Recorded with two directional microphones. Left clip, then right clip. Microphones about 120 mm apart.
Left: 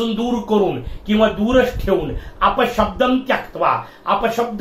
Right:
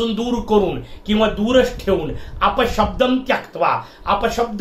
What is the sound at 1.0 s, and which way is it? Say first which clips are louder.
Speech: left 1 dB; 25° right (ahead or behind).